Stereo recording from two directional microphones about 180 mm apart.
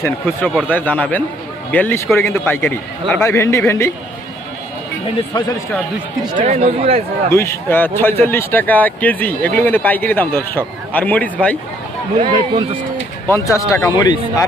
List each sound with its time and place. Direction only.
0.0 s speech: 10° left (ahead or behind)
6.3 s speech: 35° right (ahead or behind)
7.3 s speech: 15° left (ahead or behind)
12.2 s speech: 25° right (ahead or behind)
13.2 s speech: 15° left (ahead or behind)